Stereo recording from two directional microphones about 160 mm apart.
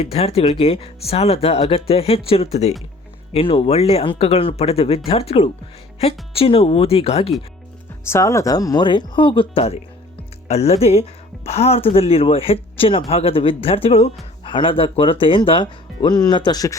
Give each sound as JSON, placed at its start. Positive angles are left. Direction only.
{"t": 0.0, "sound": "speech", "side_deg": 40}
{"t": 8.0, "sound": "speech", "side_deg": 15}